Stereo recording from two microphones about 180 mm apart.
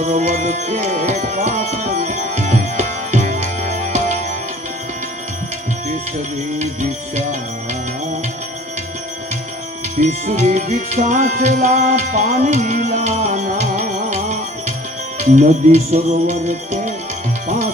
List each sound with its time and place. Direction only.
0.0 s music: 40° right (ahead or behind)
1.2 s tabla: 45° right (ahead or behind)
10.0 s music: 40° right (ahead or behind)